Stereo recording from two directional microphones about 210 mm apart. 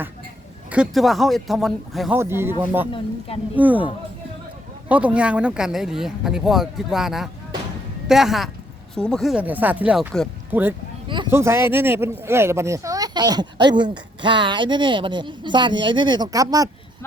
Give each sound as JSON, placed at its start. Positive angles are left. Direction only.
{"t": 0.7, "sound": "speech", "side_deg": 0}
{"t": 2.1, "sound": "speech", "side_deg": -10}
{"t": 2.9, "sound": "speech", "side_deg": 25}
{"t": 3.5, "sound": "speech", "side_deg": -5}
{"t": 4.9, "sound": "speech", "side_deg": -5}